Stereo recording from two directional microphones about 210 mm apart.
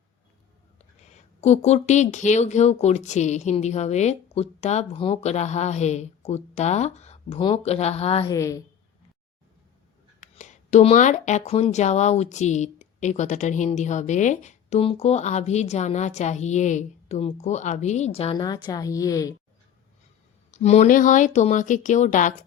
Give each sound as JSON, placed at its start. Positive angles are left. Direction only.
{"t": 1.0, "sound": "speech", "side_deg": 30}
{"t": 8.3, "sound": "a woman's voice", "side_deg": 15}
{"t": 10.2, "sound": "speech", "side_deg": 35}
{"t": 20.5, "sound": "speech", "side_deg": 30}